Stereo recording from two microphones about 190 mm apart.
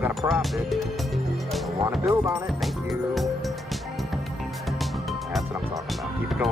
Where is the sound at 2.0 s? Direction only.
15° right (ahead or behind).